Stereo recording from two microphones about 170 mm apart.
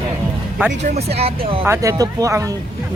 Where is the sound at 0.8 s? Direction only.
40° right (ahead or behind).